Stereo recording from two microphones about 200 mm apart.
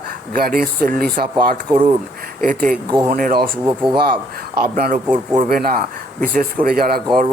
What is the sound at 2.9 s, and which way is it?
Speech, 20° right (ahead or behind).